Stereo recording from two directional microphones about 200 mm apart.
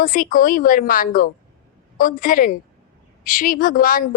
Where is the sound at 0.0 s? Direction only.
45° left (ahead or behind).